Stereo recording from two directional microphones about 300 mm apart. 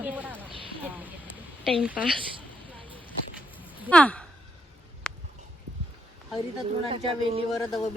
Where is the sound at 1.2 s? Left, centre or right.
Centre.